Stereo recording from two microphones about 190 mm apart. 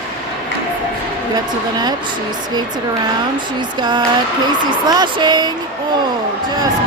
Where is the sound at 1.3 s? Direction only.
20° right (ahead or behind).